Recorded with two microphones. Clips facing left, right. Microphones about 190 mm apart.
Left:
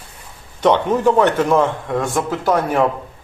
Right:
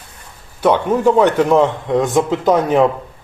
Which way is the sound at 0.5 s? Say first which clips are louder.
Right 1 dB; 10° right (ahead or behind).